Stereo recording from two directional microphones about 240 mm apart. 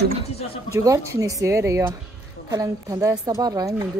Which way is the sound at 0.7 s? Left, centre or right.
Centre.